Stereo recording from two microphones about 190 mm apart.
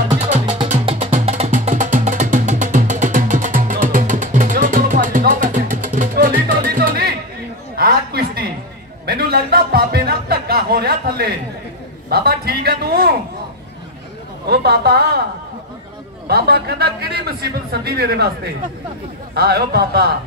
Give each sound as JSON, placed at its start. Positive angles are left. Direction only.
{"t": 0.1, "sound": "music", "side_deg": -35}
{"t": 7.7, "sound": "a sound", "side_deg": -55}
{"t": 9.0, "sound": "music", "side_deg": -55}
{"t": 12.1, "sound": "a man's voice", "side_deg": -55}
{"t": 14.5, "sound": "speech", "side_deg": -60}
{"t": 16.3, "sound": "speech", "side_deg": -55}